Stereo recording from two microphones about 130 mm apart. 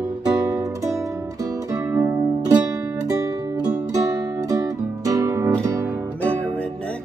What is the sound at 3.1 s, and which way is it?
Music, 25° right (ahead or behind).